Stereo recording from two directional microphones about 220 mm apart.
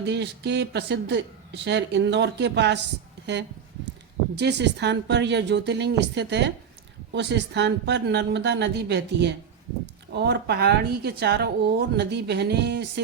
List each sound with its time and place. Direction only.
0.0 s speech: 50° right (ahead or behind)